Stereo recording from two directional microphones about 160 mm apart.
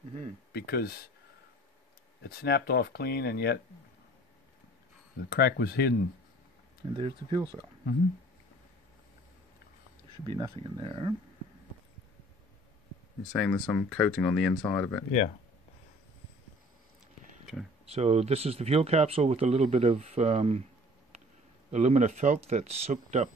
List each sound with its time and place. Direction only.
0.5 s speech: 80° left
2.2 s speech: 85° left
5.3 s speech: 75° left (ahead or behind)
7.0 s speech: 30° right (ahead or behind)
10.2 s speech: 30° right (ahead or behind)
13.3 s speech: 5° left (ahead or behind)
15.0 s speech: 45° left (ahead or behind)
17.8 s speech: 40° right (ahead or behind)
21.6 s speech: 45° right (ahead or behind)